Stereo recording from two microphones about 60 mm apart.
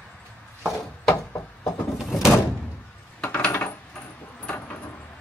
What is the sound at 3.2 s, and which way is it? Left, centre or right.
Coin, left.